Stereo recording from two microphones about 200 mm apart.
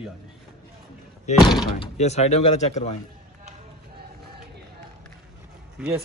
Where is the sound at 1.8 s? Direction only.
35° left (ahead or behind).